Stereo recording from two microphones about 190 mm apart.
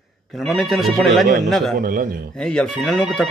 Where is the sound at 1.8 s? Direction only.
50° right (ahead or behind).